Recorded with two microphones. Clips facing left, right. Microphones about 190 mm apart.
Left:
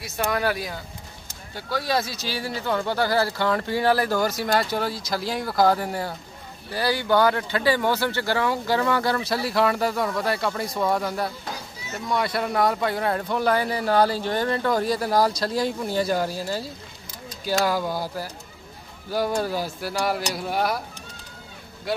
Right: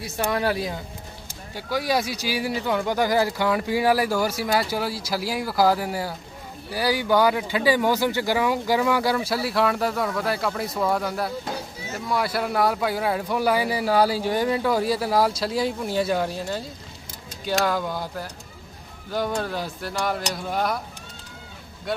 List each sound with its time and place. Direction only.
0.0 s speech: 30° right (ahead or behind)
1.5 s speech: 10° right (ahead or behind); by 20.8 s 5° left (ahead or behind)
21.9 s speech: centre (ahead or behind)